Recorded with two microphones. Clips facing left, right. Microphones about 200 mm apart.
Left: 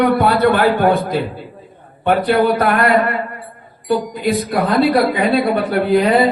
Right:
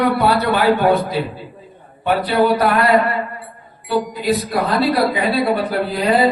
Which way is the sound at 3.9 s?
50° left (ahead or behind).